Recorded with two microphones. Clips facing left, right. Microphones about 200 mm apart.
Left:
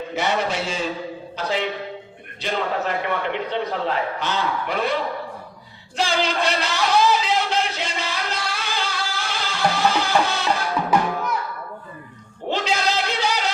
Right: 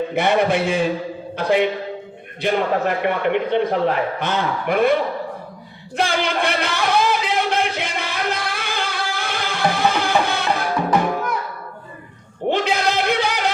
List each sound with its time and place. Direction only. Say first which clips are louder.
0.1 s a man's voice: right 4 dB; 55° right (ahead or behind)
6.0 s music: right 2 dB; 55° right (ahead or behind)
12.5 s a sound: right 4 dB; 55° right (ahead or behind)